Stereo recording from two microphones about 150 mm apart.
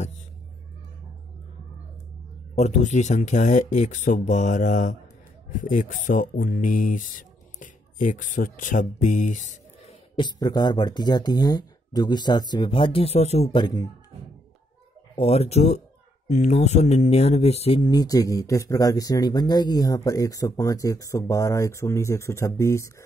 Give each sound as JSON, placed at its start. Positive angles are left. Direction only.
{"t": 2.5, "sound": "speech", "side_deg": 50}
{"t": 10.1, "sound": "speech", "side_deg": 30}
{"t": 13.6, "sound": "speech", "side_deg": 30}
{"t": 15.1, "sound": "speech", "side_deg": 40}
{"t": 17.9, "sound": "speech", "side_deg": 25}